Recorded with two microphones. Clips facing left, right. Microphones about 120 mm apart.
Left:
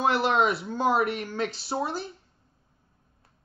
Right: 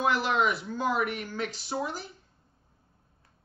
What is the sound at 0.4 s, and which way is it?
Speech, 30° left (ahead or behind).